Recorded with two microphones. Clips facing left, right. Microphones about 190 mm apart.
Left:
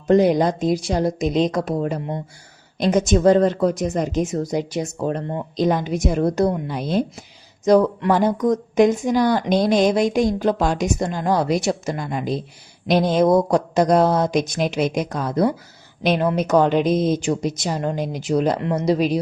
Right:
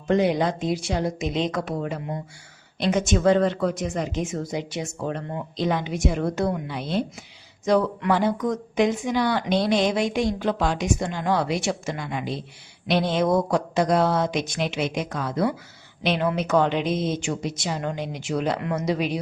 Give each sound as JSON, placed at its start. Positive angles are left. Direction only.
{"t": 0.1, "sound": "speech", "side_deg": 40}